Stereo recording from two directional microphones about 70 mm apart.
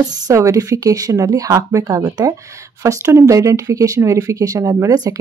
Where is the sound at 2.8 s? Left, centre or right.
Right.